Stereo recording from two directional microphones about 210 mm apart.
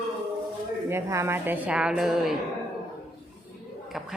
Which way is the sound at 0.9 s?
10° right (ahead or behind).